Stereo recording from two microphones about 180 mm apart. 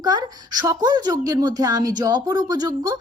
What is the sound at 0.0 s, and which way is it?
A woman's voice, 20° right (ahead or behind).